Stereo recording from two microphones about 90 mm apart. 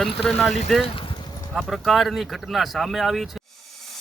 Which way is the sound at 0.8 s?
80° left.